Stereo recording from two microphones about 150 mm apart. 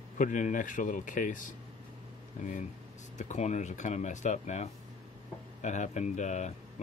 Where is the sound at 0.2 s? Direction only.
60° left (ahead or behind).